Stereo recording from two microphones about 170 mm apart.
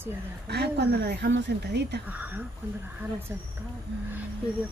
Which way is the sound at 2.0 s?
10° right (ahead or behind).